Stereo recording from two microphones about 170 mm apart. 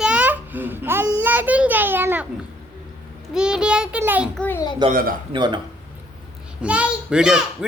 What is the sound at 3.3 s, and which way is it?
A man's voice, 5° right (ahead or behind).